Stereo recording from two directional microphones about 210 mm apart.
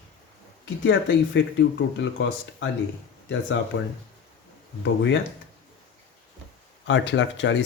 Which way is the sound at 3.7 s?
65° left (ahead or behind).